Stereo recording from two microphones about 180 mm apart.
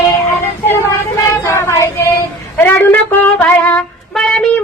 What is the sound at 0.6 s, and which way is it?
Child singing, 15° left (ahead or behind).